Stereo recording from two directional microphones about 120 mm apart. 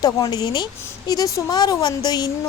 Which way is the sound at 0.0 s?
35° left (ahead or behind).